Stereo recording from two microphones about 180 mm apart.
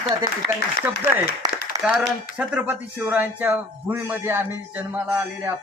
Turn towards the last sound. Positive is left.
turn(degrees=-10)  # may be behind; listen again after turning